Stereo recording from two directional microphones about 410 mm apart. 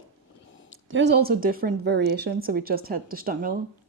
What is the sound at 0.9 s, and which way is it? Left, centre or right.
A woman's voice, right.